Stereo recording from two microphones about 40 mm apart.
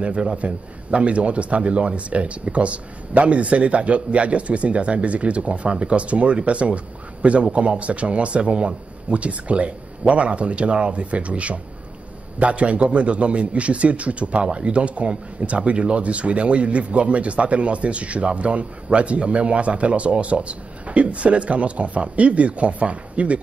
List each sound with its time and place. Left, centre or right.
0.0 s a man's voice: right